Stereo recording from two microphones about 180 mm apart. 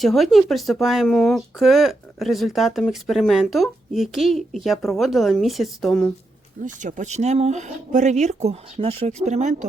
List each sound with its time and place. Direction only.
0.0 s speech: centre (ahead or behind)
6.7 s speech: 45° right (ahead or behind)